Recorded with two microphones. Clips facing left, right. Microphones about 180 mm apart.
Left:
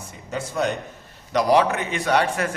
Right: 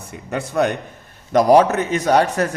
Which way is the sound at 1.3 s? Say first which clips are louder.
Right 6 dB; 45° right (ahead or behind).